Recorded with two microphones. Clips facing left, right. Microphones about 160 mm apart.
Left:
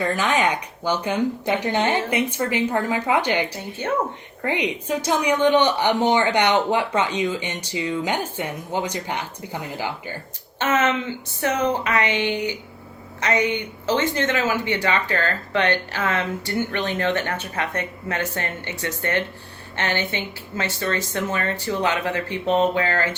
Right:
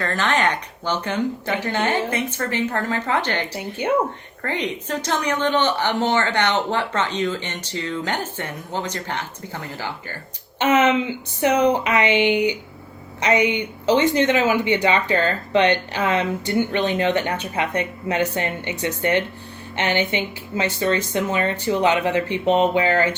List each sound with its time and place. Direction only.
0.0 s a woman's voice: 10° left (ahead or behind)
3.5 s speech: 15° right (ahead or behind)
4.4 s a woman's voice: 15° left (ahead or behind)
10.6 s speech: 15° right (ahead or behind)